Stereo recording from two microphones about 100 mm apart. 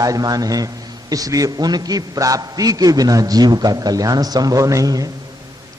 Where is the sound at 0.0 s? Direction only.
35° right (ahead or behind).